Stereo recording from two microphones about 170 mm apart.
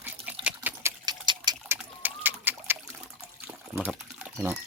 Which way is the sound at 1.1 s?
25° right (ahead or behind).